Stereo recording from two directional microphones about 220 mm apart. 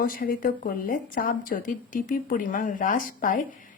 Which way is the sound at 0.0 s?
40° left (ahead or behind).